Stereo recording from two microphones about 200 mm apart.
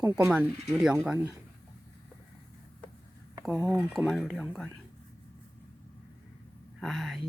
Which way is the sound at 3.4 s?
5° right (ahead or behind).